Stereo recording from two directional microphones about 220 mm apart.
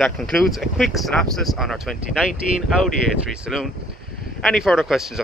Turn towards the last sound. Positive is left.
turn(degrees=0)  # may be behind; listen again after turning